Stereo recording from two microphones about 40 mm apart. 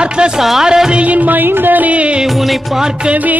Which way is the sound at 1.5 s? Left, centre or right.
Right.